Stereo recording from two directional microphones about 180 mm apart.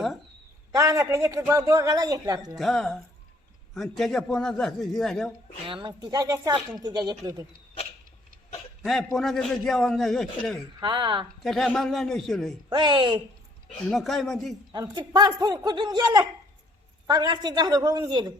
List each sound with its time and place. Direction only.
0.7 s a woman's voice: 20° right (ahead or behind)
2.6 s a man's voice: 5° left (ahead or behind)
5.6 s a woman's voice: 30° right (ahead or behind)
8.8 s a man's voice: centre (ahead or behind)
10.8 s a woman's voice: 25° right (ahead or behind)
11.4 s a man's voice: 5° left (ahead or behind)
12.7 s a woman's voice: 25° right (ahead or behind)
13.9 s a man's voice: centre (ahead or behind)
14.7 s a woman's voice: 25° right (ahead or behind)